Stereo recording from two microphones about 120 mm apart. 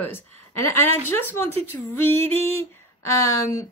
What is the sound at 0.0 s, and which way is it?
A woman's voice, 20° left (ahead or behind).